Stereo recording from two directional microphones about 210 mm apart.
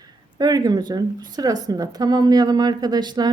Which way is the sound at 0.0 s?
20° right (ahead or behind).